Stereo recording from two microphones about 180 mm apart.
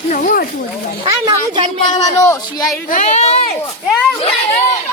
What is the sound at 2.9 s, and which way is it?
A child's voice, 40° left (ahead or behind).